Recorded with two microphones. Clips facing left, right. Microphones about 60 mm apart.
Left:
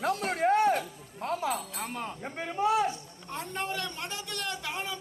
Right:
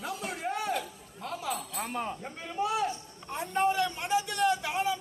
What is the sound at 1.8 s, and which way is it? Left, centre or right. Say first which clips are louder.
Speech: right 4 dB; centre.